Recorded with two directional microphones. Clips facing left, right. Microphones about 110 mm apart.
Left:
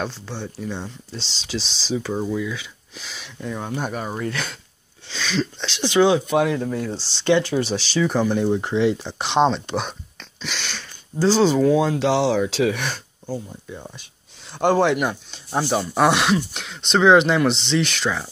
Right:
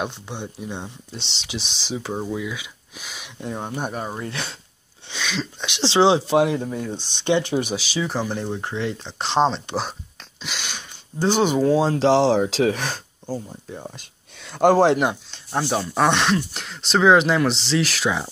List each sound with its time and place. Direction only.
0.0 s speech: 20° right (ahead or behind)
3.4 s speech: 35° right (ahead or behind)
5.2 s speech: 5° right (ahead or behind)
5.8 s speech: 25° right (ahead or behind)
7.7 s speech: 5° right (ahead or behind)
8.5 s speech: 15° left (ahead or behind)
8.9 s speech: 5° left (ahead or behind)
9.8 s a sound: 5° right (ahead or behind)
11.6 s speech: 30° right (ahead or behind)
15.3 s speech: 5° left (ahead or behind)